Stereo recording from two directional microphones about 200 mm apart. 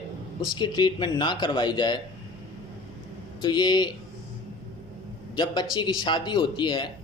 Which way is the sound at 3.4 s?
20° left (ahead or behind).